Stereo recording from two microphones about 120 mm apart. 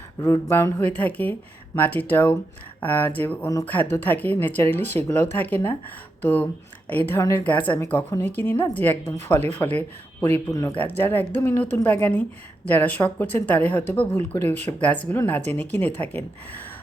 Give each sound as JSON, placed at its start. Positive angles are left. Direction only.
{"t": 0.2, "sound": "speech", "side_deg": 25}
{"t": 7.2, "sound": "speech", "side_deg": 25}
{"t": 7.4, "sound": "speech", "side_deg": 15}